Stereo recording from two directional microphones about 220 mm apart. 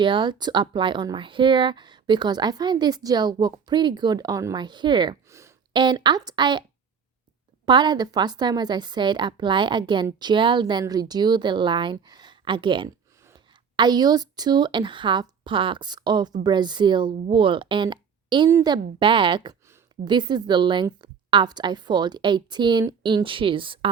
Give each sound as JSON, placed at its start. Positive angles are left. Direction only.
{"t": 0.0, "sound": "a woman's voice", "side_deg": -20}